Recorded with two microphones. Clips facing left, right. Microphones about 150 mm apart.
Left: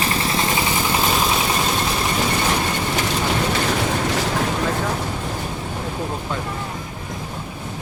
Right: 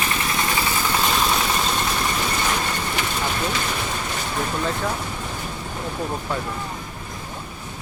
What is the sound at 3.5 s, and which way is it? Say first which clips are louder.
Train: left 6 dB; 60° left (ahead or behind).